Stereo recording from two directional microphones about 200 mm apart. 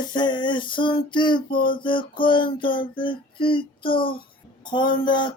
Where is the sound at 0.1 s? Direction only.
20° left (ahead or behind).